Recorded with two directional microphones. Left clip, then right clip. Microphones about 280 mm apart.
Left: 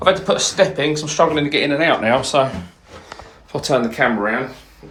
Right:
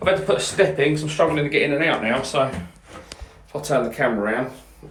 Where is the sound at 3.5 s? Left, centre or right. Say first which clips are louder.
Left 5 dB; left.